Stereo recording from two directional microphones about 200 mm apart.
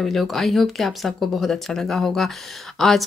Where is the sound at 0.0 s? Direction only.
Centre (ahead or behind).